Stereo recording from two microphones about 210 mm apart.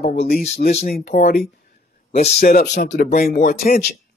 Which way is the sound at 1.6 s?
45° left (ahead or behind).